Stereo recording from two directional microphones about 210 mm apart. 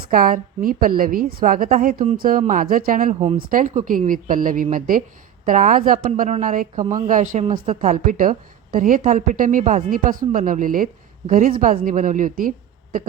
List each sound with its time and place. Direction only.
0.1 s a woman's voice: 40° right (ahead or behind)